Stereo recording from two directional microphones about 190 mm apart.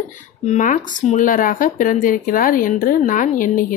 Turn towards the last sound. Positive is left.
turn(degrees=45)  # may be behind; listen again after turning